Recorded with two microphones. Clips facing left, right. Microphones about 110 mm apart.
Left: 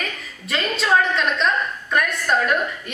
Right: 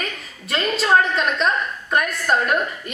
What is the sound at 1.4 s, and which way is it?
Speech, 40° right (ahead or behind).